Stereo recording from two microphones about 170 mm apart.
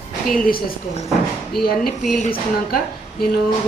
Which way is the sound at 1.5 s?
60° left (ahead or behind).